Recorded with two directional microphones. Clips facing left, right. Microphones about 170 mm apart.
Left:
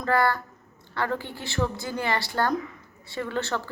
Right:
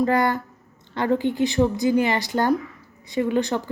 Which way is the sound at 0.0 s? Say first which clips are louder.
Right 4 dB; 20° right (ahead or behind).